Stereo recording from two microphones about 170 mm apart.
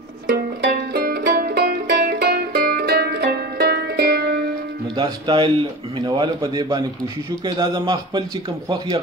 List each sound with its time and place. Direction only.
0.3 s music: 60° right (ahead or behind)
4.9 s speech: 25° right (ahead or behind)